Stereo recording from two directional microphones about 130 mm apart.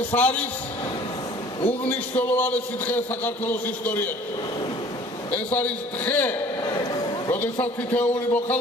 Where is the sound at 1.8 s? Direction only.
10° left (ahead or behind).